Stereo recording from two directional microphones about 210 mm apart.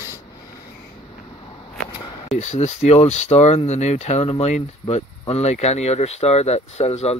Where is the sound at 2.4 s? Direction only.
30° left (ahead or behind).